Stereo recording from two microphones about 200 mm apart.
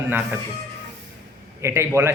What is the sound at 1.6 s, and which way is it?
Speech, 15° right (ahead or behind).